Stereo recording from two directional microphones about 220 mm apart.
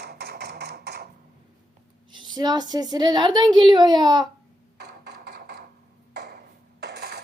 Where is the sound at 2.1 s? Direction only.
20° right (ahead or behind).